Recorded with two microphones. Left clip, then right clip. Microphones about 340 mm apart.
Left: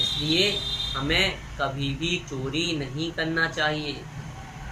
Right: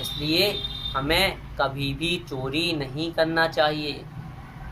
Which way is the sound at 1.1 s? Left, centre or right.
Centre.